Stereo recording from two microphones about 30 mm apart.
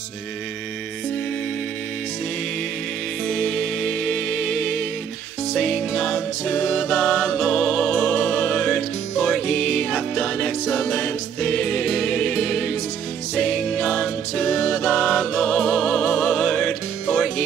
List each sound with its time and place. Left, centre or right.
3.3 s music: centre